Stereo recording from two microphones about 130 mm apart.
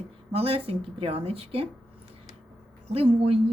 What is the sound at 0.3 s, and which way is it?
A woman's voice, 50° right (ahead or behind).